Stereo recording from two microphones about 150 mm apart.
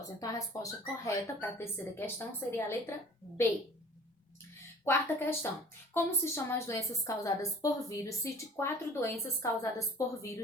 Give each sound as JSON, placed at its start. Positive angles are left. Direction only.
{"t": 0.2, "sound": "a woman's voice", "side_deg": 20}
{"t": 4.9, "sound": "a woman's voice", "side_deg": 15}